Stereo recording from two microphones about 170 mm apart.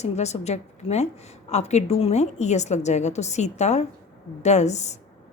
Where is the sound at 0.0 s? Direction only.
40° left (ahead or behind).